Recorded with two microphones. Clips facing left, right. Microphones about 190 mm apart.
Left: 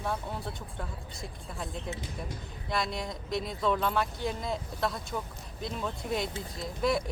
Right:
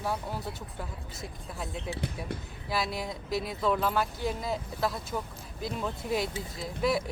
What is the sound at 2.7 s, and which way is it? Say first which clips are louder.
Speech: right 1 dB; 5° right (ahead or behind).